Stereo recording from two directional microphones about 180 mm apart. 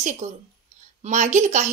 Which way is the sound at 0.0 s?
40° right (ahead or behind).